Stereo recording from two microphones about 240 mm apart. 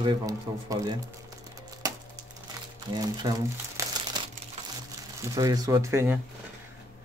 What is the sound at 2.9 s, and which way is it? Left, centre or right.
Speech, centre.